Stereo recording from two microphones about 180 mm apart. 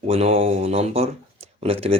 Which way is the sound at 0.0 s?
35° right (ahead or behind).